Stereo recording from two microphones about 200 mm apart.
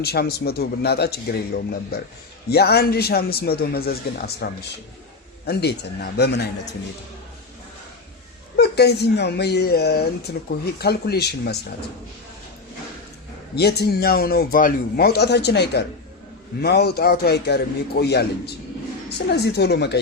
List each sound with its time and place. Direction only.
0.0 s a man's voice: 50° left (ahead or behind)
8.5 s a man's voice: 55° left (ahead or behind)
13.6 s a man's voice: 55° left (ahead or behind)